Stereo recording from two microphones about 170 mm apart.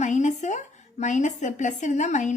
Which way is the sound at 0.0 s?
45° left (ahead or behind).